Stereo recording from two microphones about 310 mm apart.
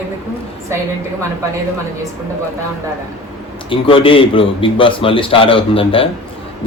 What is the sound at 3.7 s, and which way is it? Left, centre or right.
A man's voice, centre.